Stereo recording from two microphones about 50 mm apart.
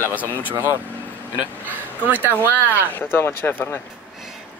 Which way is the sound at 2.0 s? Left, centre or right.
Right.